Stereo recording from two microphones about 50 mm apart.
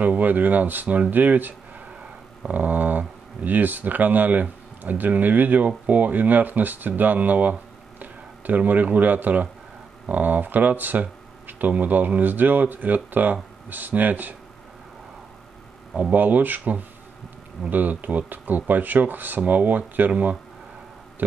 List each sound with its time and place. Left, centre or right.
0.0 s speech: right
16.1 s speech: right